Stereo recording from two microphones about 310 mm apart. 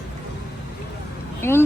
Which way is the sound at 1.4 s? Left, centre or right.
Centre.